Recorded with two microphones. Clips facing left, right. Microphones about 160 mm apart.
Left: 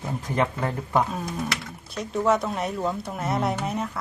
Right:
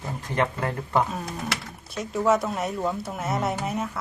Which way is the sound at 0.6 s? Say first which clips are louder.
Even; centre (ahead or behind).